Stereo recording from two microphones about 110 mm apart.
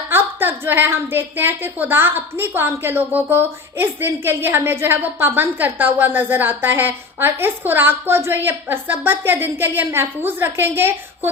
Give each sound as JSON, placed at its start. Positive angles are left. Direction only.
{"t": 0.1, "sound": "a woman's voice", "side_deg": -20}